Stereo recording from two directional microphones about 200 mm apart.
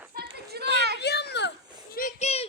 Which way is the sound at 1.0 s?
55° left (ahead or behind).